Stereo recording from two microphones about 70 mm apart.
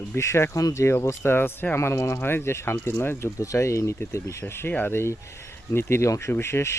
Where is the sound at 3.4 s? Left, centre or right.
Left.